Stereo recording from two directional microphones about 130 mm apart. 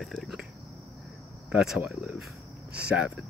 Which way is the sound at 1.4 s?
5° right (ahead or behind).